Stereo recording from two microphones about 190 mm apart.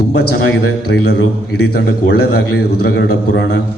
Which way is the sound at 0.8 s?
60° left (ahead or behind).